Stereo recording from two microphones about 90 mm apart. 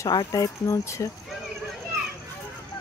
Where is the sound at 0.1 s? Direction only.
45° left (ahead or behind).